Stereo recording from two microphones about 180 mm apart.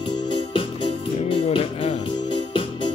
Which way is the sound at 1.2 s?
35° left (ahead or behind).